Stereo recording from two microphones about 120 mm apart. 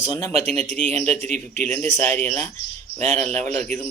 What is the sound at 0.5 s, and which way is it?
Speech, 10° left (ahead or behind).